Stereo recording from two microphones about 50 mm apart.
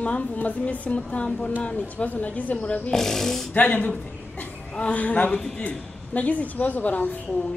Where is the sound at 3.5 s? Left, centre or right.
Left.